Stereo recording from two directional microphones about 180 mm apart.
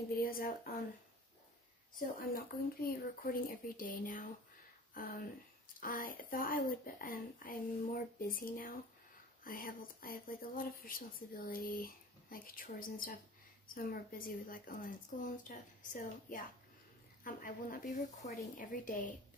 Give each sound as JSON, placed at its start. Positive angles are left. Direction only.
{"t": 0.2, "sound": "speech", "side_deg": 55}
{"t": 2.0, "sound": "speech", "side_deg": 55}